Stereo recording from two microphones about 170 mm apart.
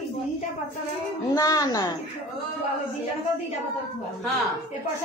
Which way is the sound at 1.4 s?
20° left (ahead or behind).